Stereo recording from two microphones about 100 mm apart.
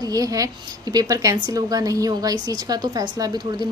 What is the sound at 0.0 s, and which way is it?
Speech, 35° right (ahead or behind).